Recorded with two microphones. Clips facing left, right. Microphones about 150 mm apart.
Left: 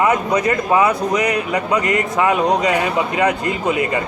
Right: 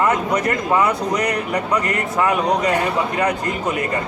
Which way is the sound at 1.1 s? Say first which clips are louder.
Left 2 dB; 90° left.